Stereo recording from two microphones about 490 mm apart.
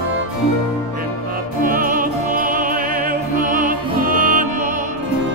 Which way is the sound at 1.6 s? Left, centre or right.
Centre.